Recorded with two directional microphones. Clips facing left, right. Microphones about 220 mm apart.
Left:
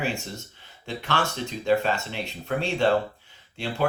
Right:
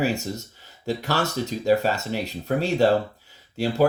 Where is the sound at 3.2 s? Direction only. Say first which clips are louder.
Right 7 dB; 40° right (ahead or behind).